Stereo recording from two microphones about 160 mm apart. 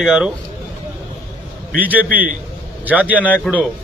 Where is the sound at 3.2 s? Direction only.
10° left (ahead or behind).